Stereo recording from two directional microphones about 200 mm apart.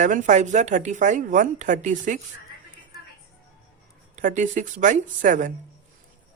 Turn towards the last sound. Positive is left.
turn(degrees=-40)  # may be behind; listen again after turning